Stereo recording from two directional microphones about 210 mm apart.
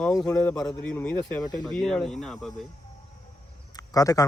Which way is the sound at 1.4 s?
20° left (ahead or behind).